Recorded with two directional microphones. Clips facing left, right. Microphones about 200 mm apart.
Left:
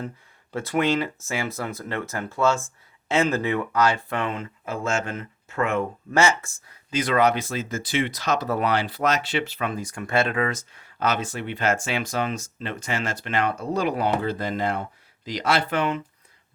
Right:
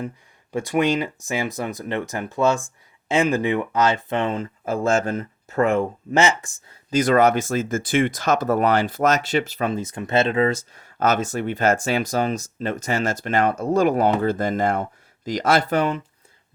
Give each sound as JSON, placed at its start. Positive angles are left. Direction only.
{"t": 0.5, "sound": "speech", "side_deg": -15}
{"t": 6.1, "sound": "speech", "side_deg": -20}
{"t": 6.9, "sound": "speech", "side_deg": -45}
{"t": 9.7, "sound": "speech", "side_deg": -25}
{"t": 10.7, "sound": "speech", "side_deg": -45}